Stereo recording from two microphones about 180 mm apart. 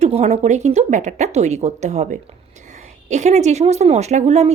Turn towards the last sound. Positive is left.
turn(degrees=-35)  # may be behind; listen again after turning